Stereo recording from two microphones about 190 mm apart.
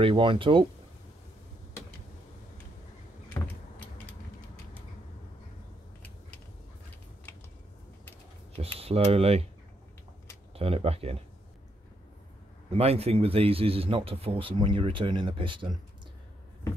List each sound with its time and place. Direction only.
0.0 s a man's voice: 25° right (ahead or behind)
3.4 s vehicle: 10° left (ahead or behind)
8.5 s speech: 30° right (ahead or behind)
10.5 s speech: 30° right (ahead or behind)
12.7 s a man's voice: 30° right (ahead or behind)